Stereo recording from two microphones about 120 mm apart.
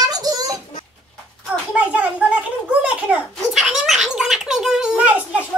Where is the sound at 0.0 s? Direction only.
30° right (ahead or behind).